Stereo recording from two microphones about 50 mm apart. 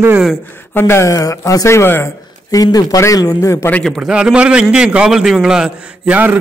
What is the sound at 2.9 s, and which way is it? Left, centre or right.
Speech, left.